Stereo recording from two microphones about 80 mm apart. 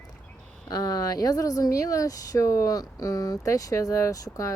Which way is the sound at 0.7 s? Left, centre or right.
Left.